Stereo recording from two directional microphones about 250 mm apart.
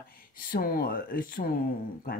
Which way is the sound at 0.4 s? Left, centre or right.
Left.